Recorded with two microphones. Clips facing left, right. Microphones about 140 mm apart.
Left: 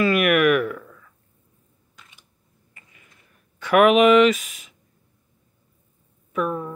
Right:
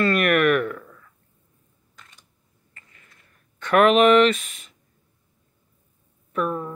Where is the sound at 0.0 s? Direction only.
5° left (ahead or behind).